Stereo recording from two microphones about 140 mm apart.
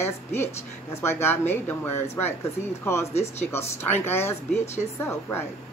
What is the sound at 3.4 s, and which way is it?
A woman's voice, 20° left (ahead or behind).